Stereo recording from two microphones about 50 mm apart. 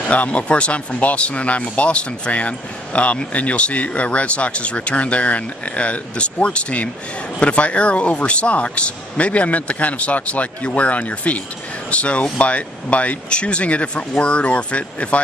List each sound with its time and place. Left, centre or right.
0.1 s speech: left